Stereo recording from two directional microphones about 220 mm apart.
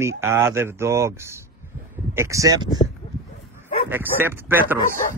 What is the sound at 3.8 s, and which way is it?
Speech, 10° right (ahead or behind).